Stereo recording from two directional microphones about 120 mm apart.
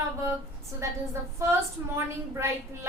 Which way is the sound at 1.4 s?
25° right (ahead or behind).